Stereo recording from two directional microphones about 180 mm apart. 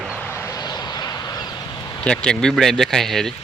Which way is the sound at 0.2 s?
15° left (ahead or behind).